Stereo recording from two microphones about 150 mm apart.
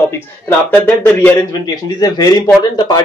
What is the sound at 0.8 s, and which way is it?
Speech, 15° left (ahead or behind).